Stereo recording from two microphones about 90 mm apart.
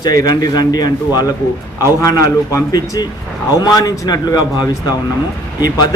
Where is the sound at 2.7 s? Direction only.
45° left (ahead or behind).